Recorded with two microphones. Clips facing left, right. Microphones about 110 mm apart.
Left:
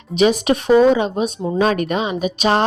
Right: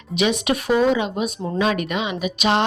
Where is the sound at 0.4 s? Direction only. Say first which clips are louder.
Left 6 dB; 35° left (ahead or behind).